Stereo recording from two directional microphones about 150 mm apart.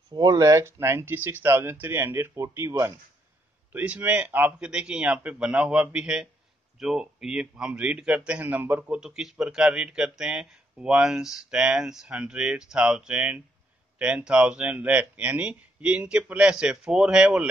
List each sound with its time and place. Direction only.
0.1 s a man's voice: 25° right (ahead or behind); by 17.5 s 5° right (ahead or behind)